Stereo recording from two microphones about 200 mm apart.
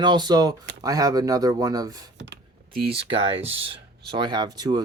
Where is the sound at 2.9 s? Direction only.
25° right (ahead or behind).